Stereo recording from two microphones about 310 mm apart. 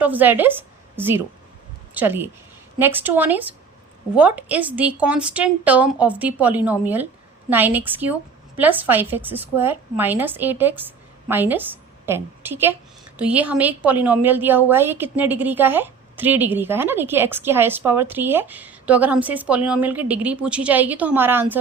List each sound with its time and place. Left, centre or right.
0.0 s a woman's voice: centre